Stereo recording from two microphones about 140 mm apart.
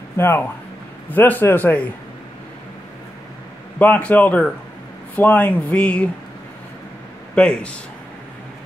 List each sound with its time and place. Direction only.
0.2 s speech: 15° left (ahead or behind)
3.8 s speech: 10° left (ahead or behind)
7.3 s speech: 5° left (ahead or behind)